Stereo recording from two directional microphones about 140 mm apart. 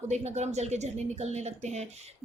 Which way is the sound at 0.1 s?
55° right (ahead or behind).